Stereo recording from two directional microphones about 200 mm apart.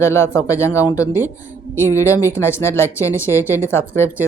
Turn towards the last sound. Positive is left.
turn(degrees=10)  # may be behind; listen again after turning